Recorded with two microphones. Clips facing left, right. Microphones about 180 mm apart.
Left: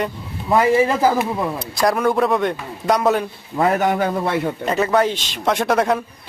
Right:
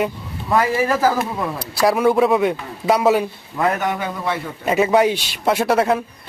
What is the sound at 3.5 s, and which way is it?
Speech, 40° left (ahead or behind).